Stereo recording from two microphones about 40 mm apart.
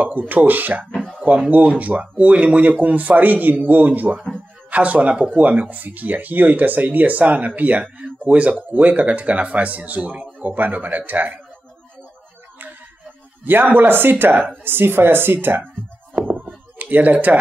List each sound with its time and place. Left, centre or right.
0.0 s speech: right
2.8 s speech: right
13.5 s speech: right
16.7 s speech: right